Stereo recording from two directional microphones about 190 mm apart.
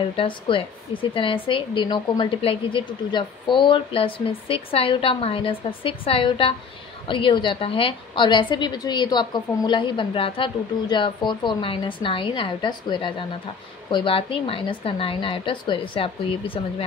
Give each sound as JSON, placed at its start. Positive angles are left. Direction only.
{"t": 0.1, "sound": "speech", "side_deg": 30}